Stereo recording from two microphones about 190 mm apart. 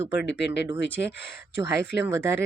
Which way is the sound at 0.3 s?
65° left (ahead or behind).